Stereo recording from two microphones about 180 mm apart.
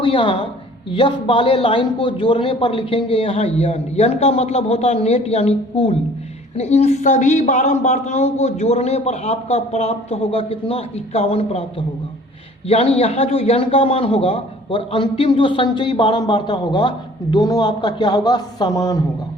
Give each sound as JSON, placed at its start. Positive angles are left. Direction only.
{"t": 0.0, "sound": "a man's voice", "side_deg": 30}
{"t": 12.6, "sound": "a man's voice", "side_deg": 35}